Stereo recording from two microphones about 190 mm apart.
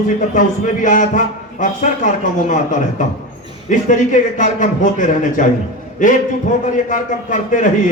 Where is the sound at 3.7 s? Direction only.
40° left (ahead or behind).